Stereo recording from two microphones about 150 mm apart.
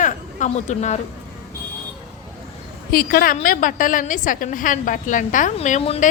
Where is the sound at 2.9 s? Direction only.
80° left.